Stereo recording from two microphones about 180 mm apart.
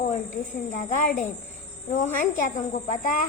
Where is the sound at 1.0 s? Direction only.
45° left (ahead or behind).